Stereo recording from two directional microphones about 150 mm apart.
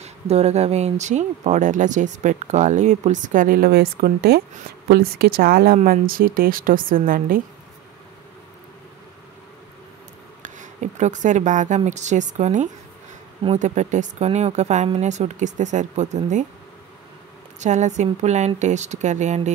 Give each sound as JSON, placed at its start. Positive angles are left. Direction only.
{"t": 0.0, "sound": "speech", "side_deg": -45}
{"t": 5.9, "sound": "a woman's voice", "side_deg": -70}
{"t": 10.4, "sound": "speech", "side_deg": -55}
{"t": 17.6, "sound": "speech", "side_deg": -50}